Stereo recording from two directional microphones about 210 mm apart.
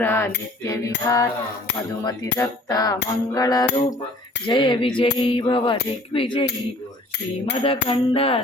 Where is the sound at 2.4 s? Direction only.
15° left (ahead or behind).